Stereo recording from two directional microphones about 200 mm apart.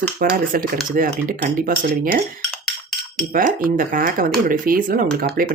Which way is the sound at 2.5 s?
Centre (ahead or behind).